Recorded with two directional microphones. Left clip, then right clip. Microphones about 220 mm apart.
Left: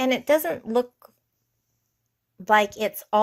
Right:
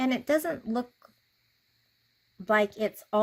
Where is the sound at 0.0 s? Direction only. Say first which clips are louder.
Left 6 dB; centre (ahead or behind).